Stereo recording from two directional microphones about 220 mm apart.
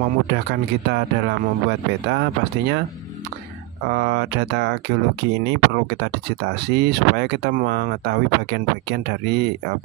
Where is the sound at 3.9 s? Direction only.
50° right (ahead or behind).